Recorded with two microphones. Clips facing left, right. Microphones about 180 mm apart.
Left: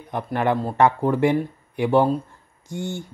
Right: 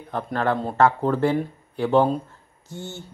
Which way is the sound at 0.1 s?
15° left (ahead or behind).